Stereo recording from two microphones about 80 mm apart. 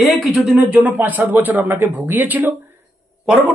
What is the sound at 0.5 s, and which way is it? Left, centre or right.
Speech, centre.